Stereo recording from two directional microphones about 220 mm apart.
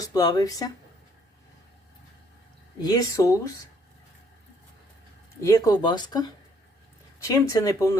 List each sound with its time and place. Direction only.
0.0 s speech: 15° left (ahead or behind)
2.8 s speech: 15° left (ahead or behind)
5.4 s speech: 15° left (ahead or behind)